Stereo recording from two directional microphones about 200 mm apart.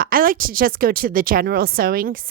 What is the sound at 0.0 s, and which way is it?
A woman's voice, 45° right (ahead or behind).